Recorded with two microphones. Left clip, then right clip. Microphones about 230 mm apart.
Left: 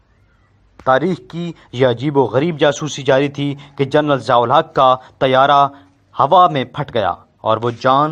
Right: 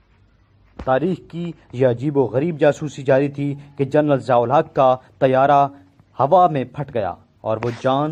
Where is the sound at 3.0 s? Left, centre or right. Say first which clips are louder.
Left 3 dB; left.